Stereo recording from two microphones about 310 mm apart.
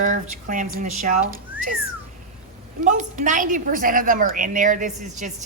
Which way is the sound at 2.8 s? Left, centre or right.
Right.